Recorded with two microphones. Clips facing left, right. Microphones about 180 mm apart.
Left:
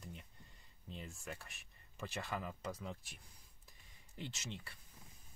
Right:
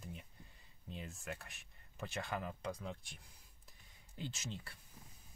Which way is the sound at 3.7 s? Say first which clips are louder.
Right 1 dB; centre (ahead or behind).